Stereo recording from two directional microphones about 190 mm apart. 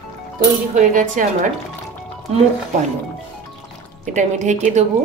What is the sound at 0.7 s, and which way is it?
Speech, 40° right (ahead or behind).